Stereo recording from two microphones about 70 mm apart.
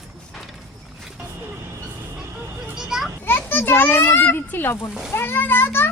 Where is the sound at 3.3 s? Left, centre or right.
Left.